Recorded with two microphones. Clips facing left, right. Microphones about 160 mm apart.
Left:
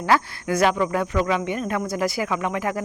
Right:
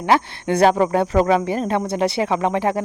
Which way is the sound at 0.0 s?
25° right (ahead or behind).